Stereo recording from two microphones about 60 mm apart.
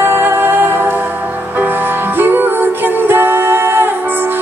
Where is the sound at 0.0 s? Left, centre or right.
Right.